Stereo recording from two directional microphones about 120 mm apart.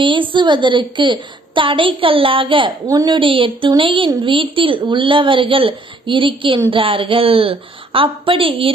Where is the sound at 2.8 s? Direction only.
30° right (ahead or behind).